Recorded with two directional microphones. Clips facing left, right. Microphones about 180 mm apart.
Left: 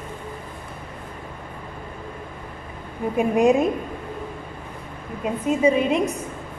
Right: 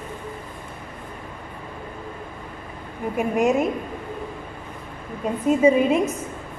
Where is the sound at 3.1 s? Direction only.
20° left (ahead or behind).